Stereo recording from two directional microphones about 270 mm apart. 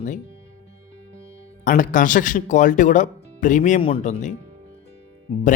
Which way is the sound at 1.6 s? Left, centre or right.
Left.